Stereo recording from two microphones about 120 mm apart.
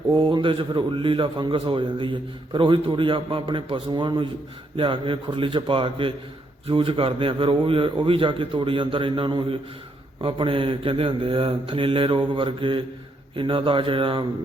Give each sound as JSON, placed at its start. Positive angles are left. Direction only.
{"t": 0.3, "sound": "a man's voice", "side_deg": -45}